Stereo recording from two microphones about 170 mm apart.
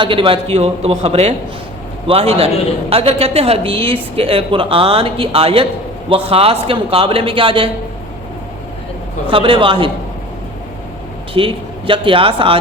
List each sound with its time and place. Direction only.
0.0 s a woman's voice: 30° right (ahead or behind)
9.3 s a woman's voice: 30° right (ahead or behind)
11.3 s a woman's voice: 30° right (ahead or behind)